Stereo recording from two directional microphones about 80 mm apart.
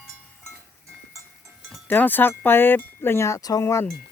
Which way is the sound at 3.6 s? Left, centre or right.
Left.